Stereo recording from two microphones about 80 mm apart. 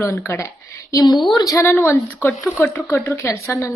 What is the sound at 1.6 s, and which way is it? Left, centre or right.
Speech, left.